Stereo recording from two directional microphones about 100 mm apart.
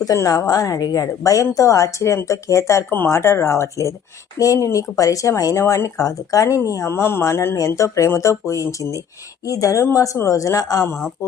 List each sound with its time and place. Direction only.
0.0 s speech: 35° left (ahead or behind)